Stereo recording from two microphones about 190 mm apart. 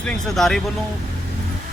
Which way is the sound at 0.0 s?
5° left (ahead or behind).